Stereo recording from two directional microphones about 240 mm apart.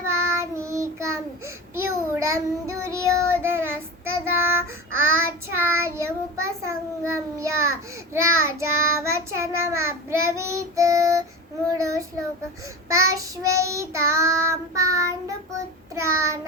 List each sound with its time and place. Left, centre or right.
0.1 s child singing: centre
6.7 s a child's voice: centre
12.9 s a child's voice: centre